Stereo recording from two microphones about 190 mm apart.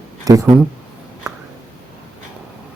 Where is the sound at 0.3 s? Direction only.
20° right (ahead or behind).